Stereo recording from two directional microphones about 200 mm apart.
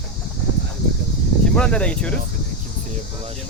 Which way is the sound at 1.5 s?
5° left (ahead or behind).